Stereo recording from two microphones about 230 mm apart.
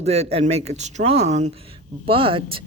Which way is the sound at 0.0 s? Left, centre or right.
Right.